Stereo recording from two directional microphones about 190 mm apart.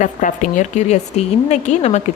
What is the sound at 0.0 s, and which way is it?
A woman's voice, 40° left (ahead or behind).